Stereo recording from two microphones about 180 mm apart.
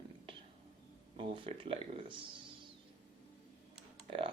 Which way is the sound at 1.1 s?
30° right (ahead or behind).